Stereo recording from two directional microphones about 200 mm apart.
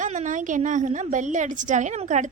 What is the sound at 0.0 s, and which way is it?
Speech, 40° right (ahead or behind).